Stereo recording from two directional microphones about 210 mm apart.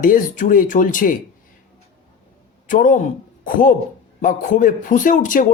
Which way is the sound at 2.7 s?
40° left (ahead or behind).